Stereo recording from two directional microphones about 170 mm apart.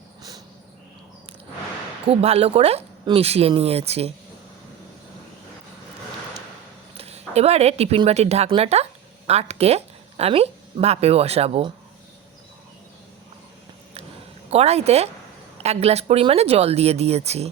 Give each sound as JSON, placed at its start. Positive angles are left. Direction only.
{"t": 2.0, "sound": "speech", "side_deg": -35}
{"t": 6.9, "sound": "speech", "side_deg": -35}
{"t": 14.5, "sound": "speech", "side_deg": -40}